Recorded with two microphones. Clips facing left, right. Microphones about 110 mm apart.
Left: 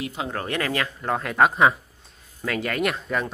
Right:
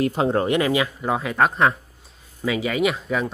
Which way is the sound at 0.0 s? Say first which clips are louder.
Right 9 dB; 40° right (ahead or behind).